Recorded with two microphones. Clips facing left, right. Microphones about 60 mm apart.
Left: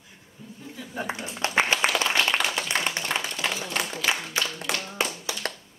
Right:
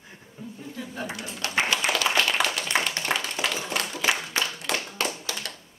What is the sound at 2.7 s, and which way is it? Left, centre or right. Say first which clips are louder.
Clapping: right 2 dB; centre.